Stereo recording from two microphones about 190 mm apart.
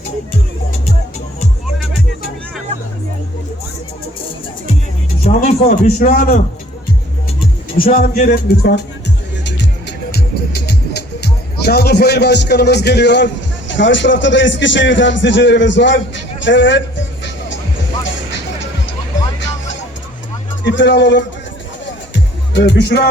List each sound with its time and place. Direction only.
5.2 s a man's voice: 40° left (ahead or behind)
7.9 s a man's voice: 45° left (ahead or behind)
9.4 s speech: 65° left (ahead or behind)
20.7 s speech: 70° left (ahead or behind)
22.1 s music: 70° left (ahead or behind)